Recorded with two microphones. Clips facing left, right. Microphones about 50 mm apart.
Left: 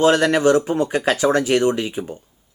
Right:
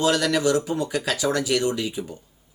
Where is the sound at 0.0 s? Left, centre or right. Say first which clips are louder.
Left 6 dB; left.